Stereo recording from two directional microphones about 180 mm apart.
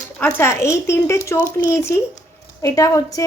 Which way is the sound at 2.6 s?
20° left (ahead or behind).